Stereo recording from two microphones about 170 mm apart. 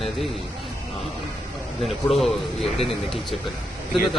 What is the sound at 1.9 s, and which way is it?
Speech, centre (ahead or behind).